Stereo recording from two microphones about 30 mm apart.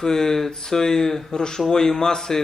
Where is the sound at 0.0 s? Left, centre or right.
Centre.